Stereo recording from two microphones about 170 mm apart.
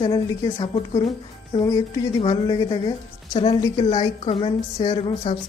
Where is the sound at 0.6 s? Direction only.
30° left (ahead or behind).